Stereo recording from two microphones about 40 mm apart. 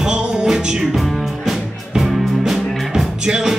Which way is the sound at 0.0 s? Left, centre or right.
Right.